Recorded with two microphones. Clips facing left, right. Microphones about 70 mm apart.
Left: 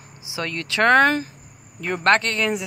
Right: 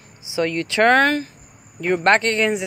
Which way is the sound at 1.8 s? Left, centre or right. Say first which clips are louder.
Right 2 dB; centre.